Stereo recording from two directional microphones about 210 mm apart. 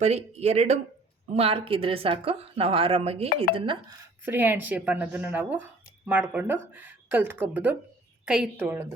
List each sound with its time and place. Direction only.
0.0 s speech: 30° right (ahead or behind)
4.3 s speech: 10° right (ahead or behind)